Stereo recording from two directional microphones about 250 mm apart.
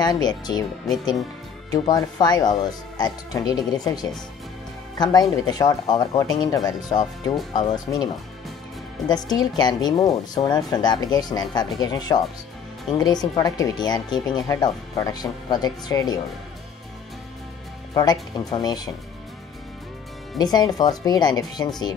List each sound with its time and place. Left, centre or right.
0.0 s speech: centre
1.7 s speech: centre
9.1 s speech: centre
17.9 s speech: centre
20.3 s speech: centre